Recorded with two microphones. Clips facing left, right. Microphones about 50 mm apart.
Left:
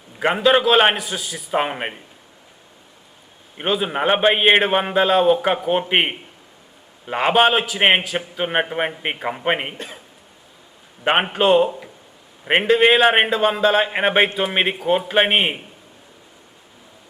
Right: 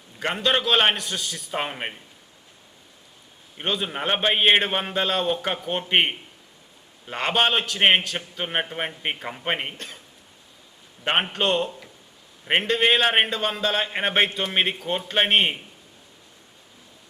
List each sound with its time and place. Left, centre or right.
0.2 s speech: centre
3.6 s speech: centre
11.0 s speech: centre